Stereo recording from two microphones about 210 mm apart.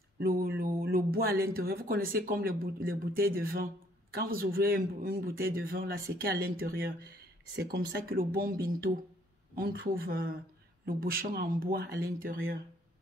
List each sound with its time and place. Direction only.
0.2 s speech: 45° right (ahead or behind)